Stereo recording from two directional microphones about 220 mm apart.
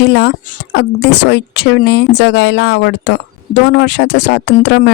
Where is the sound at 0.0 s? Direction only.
50° left (ahead or behind).